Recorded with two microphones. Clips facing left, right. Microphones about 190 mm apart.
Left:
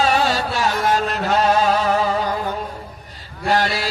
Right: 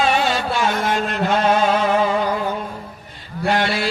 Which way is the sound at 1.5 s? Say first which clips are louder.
Even; 40° left (ahead or behind).